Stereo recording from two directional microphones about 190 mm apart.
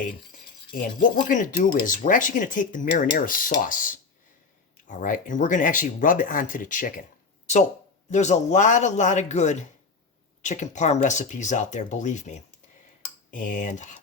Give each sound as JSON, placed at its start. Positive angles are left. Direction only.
{"t": 0.7, "sound": "speech", "side_deg": 45}
{"t": 8.1, "sound": "speech", "side_deg": 40}